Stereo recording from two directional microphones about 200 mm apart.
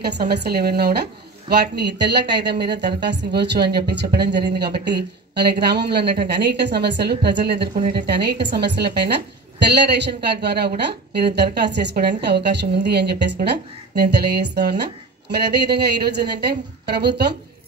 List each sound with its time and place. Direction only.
0.0 s a woman's voice: 55° right (ahead or behind)